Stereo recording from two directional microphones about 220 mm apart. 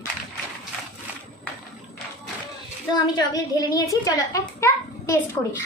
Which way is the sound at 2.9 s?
20° left (ahead or behind).